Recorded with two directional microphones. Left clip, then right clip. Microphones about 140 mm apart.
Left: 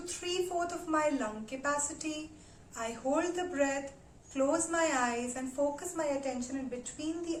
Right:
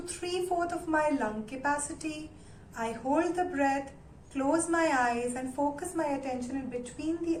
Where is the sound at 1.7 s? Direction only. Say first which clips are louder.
Right 2 dB; 15° left (ahead or behind).